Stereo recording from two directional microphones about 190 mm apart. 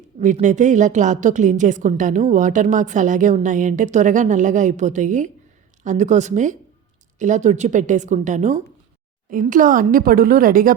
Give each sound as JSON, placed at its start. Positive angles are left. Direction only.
{"t": 0.2, "sound": "a woman's voice", "side_deg": -40}